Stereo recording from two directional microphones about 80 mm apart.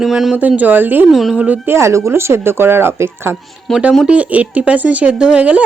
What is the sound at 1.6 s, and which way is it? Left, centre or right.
Speech, right.